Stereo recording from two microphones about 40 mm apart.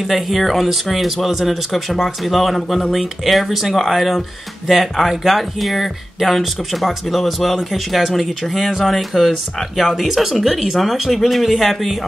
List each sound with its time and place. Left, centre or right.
0.1 s speech: centre